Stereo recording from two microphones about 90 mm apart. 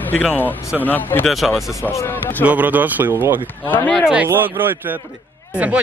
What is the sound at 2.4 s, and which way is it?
Speech, 20° right (ahead or behind).